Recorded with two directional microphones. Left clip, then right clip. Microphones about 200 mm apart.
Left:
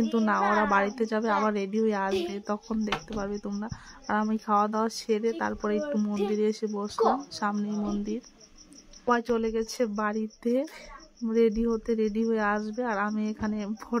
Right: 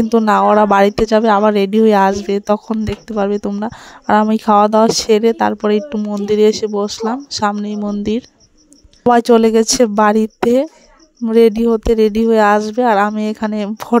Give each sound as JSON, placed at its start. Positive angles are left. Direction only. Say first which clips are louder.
{"t": 0.1, "sound": "speech", "louder": "right 15 dB", "side_deg": -50}